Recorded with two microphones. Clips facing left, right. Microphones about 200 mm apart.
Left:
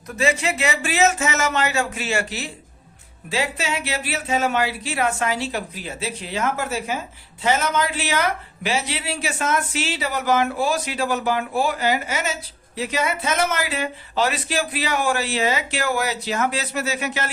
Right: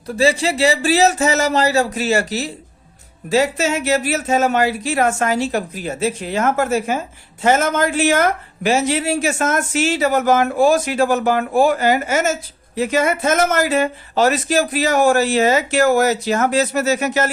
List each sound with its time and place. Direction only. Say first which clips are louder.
0.2 s speech: right 6 dB; 35° right (ahead or behind)